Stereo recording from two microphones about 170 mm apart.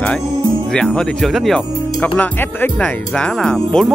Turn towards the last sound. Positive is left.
turn(degrees=5)  # may be behind; listen again after turning